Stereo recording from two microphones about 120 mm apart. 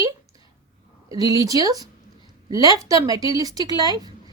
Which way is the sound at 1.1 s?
30° right (ahead or behind).